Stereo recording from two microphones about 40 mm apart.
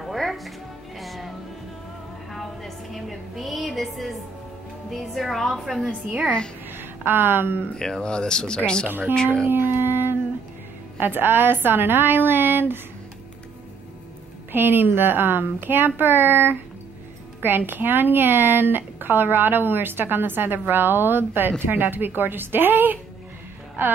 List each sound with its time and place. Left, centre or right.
0.0 s music: centre
2.3 s a sound: centre
4.9 s a woman's voice: centre
5.9 s a woman's voice: right
7.1 s speech: right
7.7 s speech: centre
9.5 s howl: right
11.0 s speech: right
14.5 s speech: right